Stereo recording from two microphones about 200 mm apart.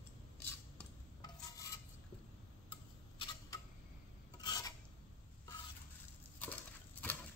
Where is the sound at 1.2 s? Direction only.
15° left (ahead or behind).